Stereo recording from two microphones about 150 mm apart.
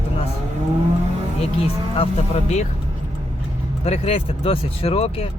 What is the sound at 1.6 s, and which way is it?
Speech, 40° left (ahead or behind).